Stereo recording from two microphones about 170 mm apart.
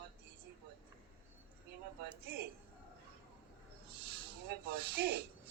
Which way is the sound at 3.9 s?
75° right (ahead or behind).